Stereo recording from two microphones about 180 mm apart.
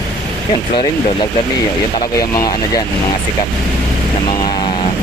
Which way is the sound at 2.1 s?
20° left (ahead or behind).